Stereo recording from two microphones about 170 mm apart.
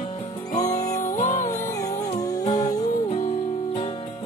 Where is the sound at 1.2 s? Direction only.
45° left (ahead or behind).